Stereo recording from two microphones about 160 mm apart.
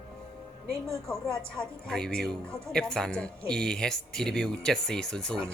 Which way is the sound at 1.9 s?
5° left (ahead or behind).